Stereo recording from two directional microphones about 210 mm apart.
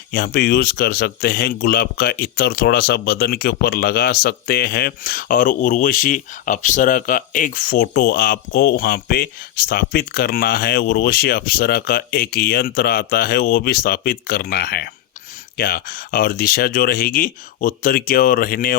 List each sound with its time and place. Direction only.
0.1 s speech: 45° left (ahead or behind)